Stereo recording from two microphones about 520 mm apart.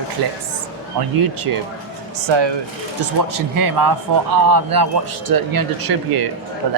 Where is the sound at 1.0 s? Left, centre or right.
Right.